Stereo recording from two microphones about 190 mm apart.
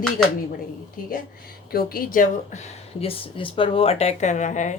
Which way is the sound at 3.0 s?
30° left (ahead or behind).